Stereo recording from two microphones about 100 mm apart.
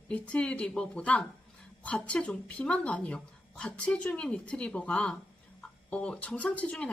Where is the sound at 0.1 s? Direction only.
10° left (ahead or behind).